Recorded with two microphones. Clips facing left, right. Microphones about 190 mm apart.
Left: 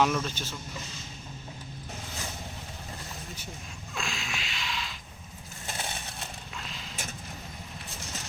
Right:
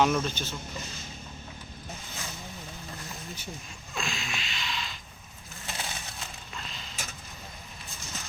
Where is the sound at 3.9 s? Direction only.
Centre (ahead or behind).